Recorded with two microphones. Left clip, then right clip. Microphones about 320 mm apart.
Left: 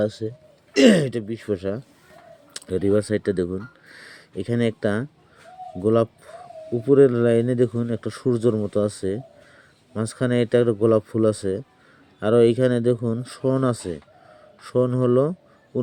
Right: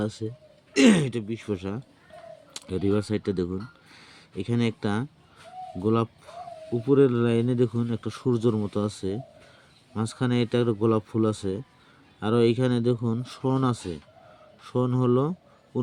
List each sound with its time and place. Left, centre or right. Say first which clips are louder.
0.0 s speech: left 7 dB; centre